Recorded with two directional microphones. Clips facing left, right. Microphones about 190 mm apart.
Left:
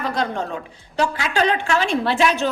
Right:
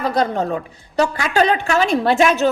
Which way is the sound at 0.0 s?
40° right (ahead or behind).